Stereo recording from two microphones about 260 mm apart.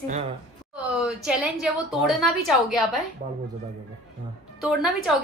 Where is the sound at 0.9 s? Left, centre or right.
Centre.